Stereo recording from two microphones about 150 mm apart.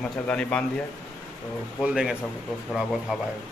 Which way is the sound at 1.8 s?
5° right (ahead or behind).